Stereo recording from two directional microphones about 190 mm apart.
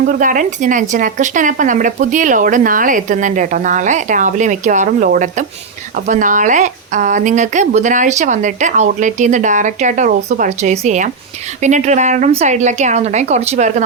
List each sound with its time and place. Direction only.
0.0 s a woman's voice: 45° right (ahead or behind)